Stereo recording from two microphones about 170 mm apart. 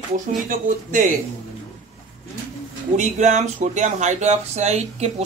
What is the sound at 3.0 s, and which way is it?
Speech, 45° right (ahead or behind).